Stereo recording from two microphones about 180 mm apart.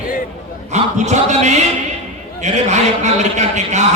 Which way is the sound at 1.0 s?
40° right (ahead or behind).